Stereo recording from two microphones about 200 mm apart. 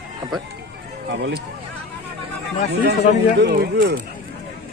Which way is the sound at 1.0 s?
60° right (ahead or behind).